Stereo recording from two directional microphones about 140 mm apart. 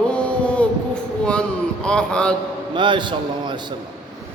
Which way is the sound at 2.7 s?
35° right (ahead or behind).